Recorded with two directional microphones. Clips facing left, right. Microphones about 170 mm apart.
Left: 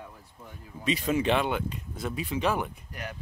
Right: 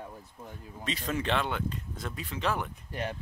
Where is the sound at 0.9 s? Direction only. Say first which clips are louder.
Left 6 dB; 10° left (ahead or behind).